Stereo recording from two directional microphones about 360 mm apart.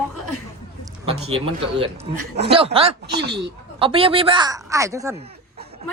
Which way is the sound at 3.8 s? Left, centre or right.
Centre.